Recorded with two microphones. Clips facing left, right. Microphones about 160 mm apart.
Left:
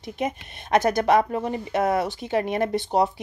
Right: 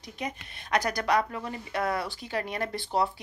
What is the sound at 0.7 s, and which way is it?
A woman's voice, 25° left (ahead or behind).